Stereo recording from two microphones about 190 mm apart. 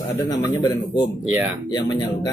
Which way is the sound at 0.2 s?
15° left (ahead or behind).